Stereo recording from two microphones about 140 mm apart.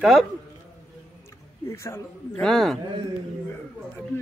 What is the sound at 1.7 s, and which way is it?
Speech, 20° left (ahead or behind).